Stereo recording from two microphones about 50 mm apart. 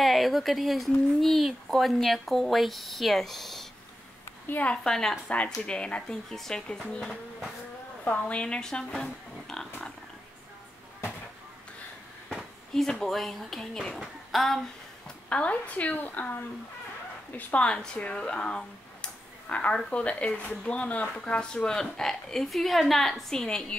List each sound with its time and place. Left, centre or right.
0.0 s speech: centre
4.5 s a woman's voice: left
4.8 s a woman's voice: centre
5.7 s speech: left
6.3 s a woman's voice: centre
8.0 s speech: left; by 9.7 s centre
12.4 s a sound: centre
13.0 s speech: centre
15.2 s a woman's voice: left
17.4 s a woman's voice: left
17.6 s speech: left
19.7 s a woman's voice: left